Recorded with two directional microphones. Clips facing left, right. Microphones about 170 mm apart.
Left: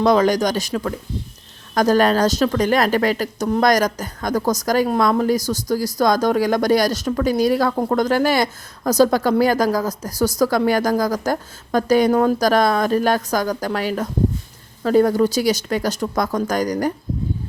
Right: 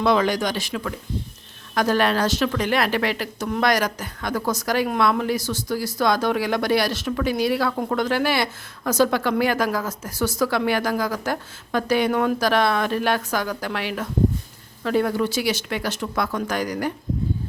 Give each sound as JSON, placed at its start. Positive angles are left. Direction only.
{"t": 0.0, "sound": "a woman's voice", "side_deg": 40}